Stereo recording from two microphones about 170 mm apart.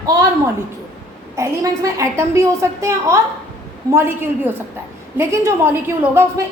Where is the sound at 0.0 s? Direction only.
20° right (ahead or behind).